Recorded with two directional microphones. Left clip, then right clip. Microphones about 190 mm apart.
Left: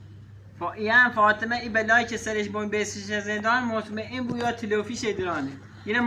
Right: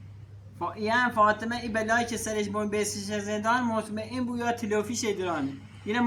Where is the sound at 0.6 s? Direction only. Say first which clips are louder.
Left 6 dB; 25° right (ahead or behind).